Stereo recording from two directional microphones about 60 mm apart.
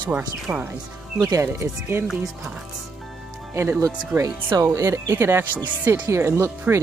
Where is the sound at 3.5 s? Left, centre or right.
Right.